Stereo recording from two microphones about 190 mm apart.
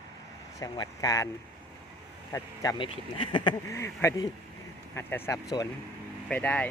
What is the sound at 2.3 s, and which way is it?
Speech, 20° left (ahead or behind).